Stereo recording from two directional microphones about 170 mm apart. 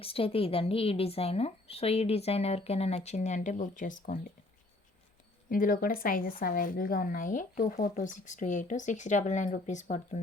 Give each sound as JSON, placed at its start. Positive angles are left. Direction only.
{"t": 0.0, "sound": "speech", "side_deg": 35}
{"t": 5.5, "sound": "a woman's voice", "side_deg": 55}